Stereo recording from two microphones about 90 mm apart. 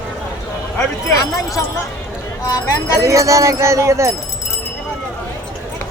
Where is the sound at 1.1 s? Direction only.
40° left (ahead or behind).